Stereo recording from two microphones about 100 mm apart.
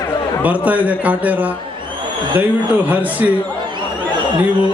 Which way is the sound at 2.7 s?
15° right (ahead or behind).